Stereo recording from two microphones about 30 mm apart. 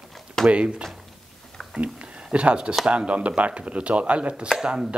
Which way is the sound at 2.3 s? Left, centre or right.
Right.